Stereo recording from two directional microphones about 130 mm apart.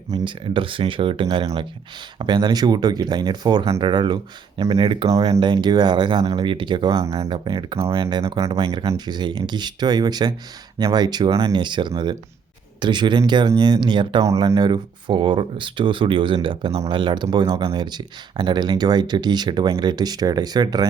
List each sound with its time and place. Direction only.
0.1 s speech: 35° right (ahead or behind)
3.6 s speech: 45° right (ahead or behind)
5.0 s speech: 25° right (ahead or behind)